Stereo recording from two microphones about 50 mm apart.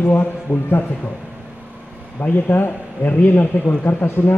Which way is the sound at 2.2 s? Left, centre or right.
Left.